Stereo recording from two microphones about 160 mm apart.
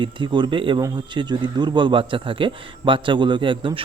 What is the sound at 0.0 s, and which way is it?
A man's voice, 30° right (ahead or behind).